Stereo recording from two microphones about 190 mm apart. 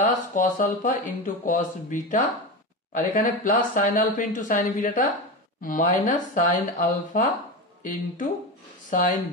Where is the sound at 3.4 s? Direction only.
45° left (ahead or behind).